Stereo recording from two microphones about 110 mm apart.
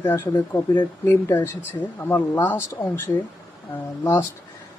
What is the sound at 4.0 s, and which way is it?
Speech, 25° left (ahead or behind).